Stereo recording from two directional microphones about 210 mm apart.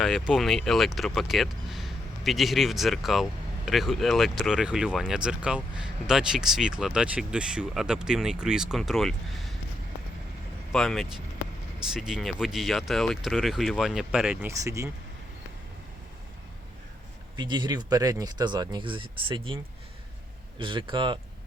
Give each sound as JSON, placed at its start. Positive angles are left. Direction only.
{"t": 0.0, "sound": "speech", "side_deg": 0}
{"t": 10.7, "sound": "speech", "side_deg": 0}
{"t": 17.3, "sound": "speech", "side_deg": -20}
{"t": 20.6, "sound": "speech", "side_deg": -25}